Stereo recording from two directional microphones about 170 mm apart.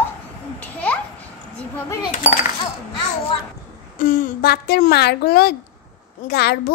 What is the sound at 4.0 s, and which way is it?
A woman's voice, 55° left (ahead or behind).